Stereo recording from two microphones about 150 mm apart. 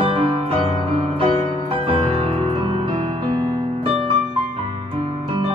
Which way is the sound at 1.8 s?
40° right (ahead or behind).